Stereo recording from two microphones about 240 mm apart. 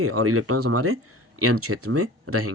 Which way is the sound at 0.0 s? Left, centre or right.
Right.